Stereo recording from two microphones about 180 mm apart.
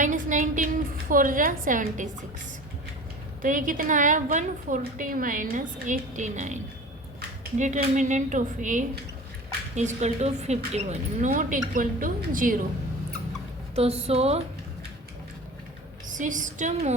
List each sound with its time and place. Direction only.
0.0 s a woman's voice: 45° right (ahead or behind)
3.4 s a woman's voice: 50° right (ahead or behind)
7.9 s a woman's voice: 40° right (ahead or behind)
13.7 s a woman's voice: 35° right (ahead or behind)
16.0 s a woman's voice: 45° right (ahead or behind)